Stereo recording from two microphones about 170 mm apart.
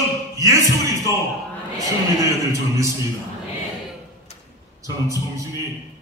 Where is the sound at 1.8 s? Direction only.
20° right (ahead or behind).